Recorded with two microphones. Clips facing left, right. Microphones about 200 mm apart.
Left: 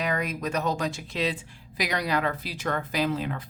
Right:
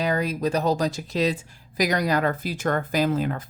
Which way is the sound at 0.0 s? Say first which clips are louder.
Right 5 dB; 30° right (ahead or behind).